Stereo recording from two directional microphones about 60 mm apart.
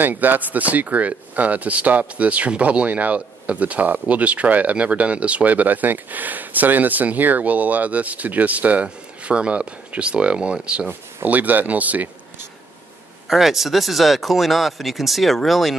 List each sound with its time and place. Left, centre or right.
0.0 s speech: right
11.2 s speech: right
13.3 s speech: centre